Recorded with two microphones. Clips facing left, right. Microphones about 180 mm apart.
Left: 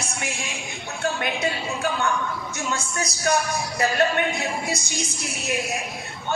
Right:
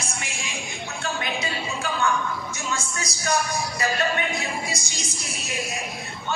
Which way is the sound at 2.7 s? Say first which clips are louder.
Left 3 dB; 60° left (ahead or behind).